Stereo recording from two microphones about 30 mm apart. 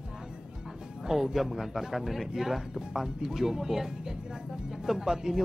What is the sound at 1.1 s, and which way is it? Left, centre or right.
A man's voice, centre.